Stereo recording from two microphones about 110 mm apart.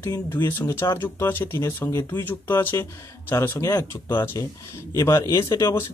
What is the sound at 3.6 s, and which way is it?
Speech, 30° left (ahead or behind).